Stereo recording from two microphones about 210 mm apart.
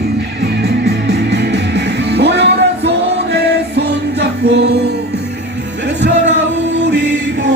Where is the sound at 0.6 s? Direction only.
50° right (ahead or behind).